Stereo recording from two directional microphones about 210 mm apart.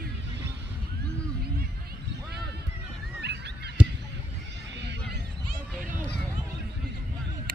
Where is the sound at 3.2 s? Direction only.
50° right (ahead or behind).